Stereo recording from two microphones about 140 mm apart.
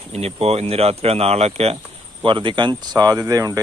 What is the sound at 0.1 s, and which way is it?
Speech, 45° right (ahead or behind).